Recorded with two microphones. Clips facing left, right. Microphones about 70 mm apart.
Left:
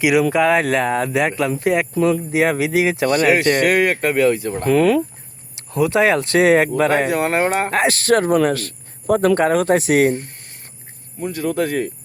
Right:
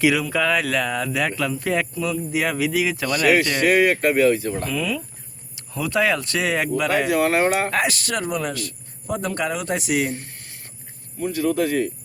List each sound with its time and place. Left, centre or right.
0.0 s speech: centre; by 5.0 s left
5.8 s speech: left